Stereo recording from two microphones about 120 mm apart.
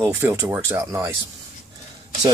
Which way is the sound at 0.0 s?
20° right (ahead or behind).